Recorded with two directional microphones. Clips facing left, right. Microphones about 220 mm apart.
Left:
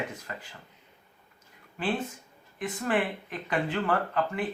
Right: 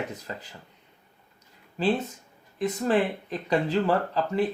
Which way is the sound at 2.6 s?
30° right (ahead or behind).